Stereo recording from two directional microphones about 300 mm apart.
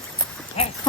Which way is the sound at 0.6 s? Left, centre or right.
Centre.